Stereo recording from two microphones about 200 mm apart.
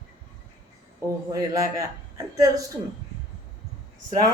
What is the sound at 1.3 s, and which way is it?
Speech, 15° right (ahead or behind).